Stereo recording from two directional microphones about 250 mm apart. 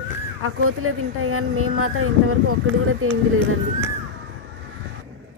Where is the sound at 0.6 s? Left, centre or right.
Right.